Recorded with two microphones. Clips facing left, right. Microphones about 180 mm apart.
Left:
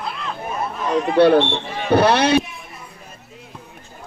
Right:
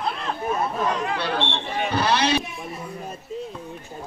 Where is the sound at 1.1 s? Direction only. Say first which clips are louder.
Left 12 dB; 60° left (ahead or behind).